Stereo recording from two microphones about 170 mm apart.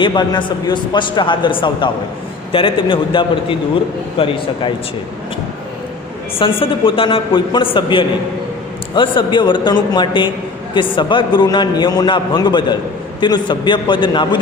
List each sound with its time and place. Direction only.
0.0 s a man's voice: 30° left (ahead or behind)
6.4 s a man's voice: 30° left (ahead or behind)